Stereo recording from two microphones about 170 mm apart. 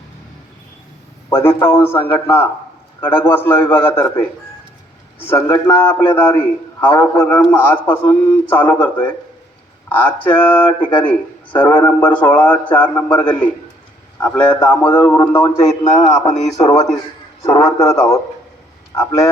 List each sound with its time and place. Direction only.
1.3 s a man's voice: 15° left (ahead or behind)
14.4 s a man's voice: 25° left (ahead or behind)
14.9 s a man's voice: 15° left (ahead or behind)